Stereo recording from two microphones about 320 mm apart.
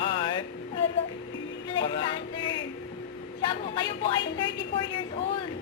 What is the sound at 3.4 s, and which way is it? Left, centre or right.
Speech, centre.